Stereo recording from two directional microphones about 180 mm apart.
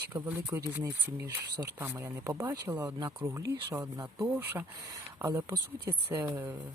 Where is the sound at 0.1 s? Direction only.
10° right (ahead or behind).